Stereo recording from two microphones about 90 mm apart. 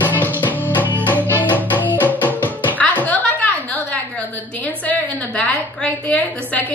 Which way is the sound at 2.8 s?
20° left (ahead or behind).